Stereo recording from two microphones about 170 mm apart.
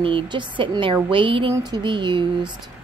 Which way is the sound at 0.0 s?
30° right (ahead or behind).